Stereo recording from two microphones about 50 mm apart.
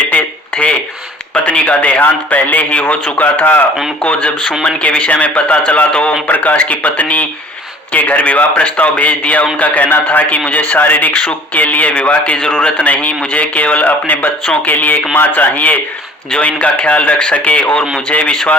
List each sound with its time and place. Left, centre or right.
0.1 s a sound: left
1.3 s a man's voice: left
4.0 s a man's voice: left
6.2 s a man's voice: left